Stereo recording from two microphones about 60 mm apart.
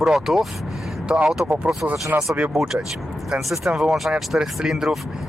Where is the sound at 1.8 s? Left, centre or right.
Right.